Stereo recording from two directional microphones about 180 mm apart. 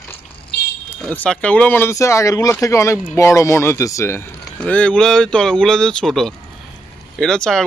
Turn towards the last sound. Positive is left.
turn(degrees=5)  # may be behind; listen again after turning